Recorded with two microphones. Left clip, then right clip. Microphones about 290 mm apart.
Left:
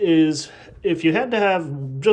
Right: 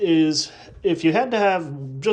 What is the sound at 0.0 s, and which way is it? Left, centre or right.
Speech, centre.